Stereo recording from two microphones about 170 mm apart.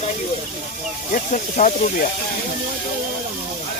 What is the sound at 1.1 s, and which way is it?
Speech, 50° left (ahead or behind).